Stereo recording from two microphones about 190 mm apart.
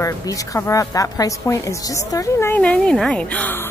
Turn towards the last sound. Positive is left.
turn(degrees=10)  # may be behind; listen again after turning